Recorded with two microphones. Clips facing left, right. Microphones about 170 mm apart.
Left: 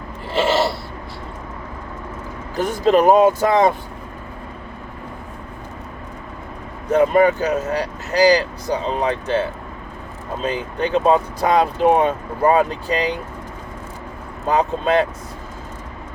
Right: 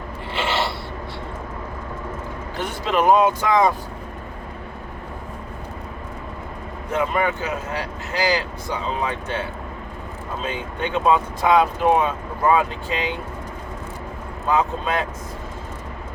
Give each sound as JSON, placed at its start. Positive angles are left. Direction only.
{"t": 0.3, "sound": "filing", "side_deg": 40}
{"t": 2.6, "sound": "speech", "side_deg": 40}
{"t": 6.9, "sound": "speech", "side_deg": 40}
{"t": 10.4, "sound": "speech", "side_deg": 35}
{"t": 14.5, "sound": "speech", "side_deg": 35}